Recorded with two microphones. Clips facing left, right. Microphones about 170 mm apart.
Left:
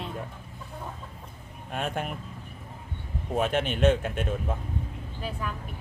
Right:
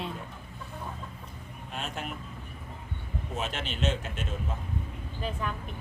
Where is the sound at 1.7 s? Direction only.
55° left (ahead or behind).